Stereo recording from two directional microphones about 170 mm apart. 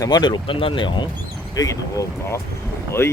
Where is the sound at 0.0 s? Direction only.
25° left (ahead or behind).